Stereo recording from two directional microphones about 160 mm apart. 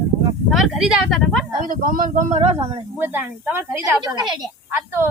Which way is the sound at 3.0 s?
10° right (ahead or behind).